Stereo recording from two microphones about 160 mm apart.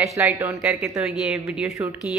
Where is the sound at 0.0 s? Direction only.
15° right (ahead or behind).